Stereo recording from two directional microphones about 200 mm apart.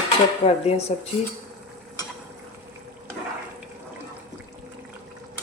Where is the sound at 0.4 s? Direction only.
30° left (ahead or behind).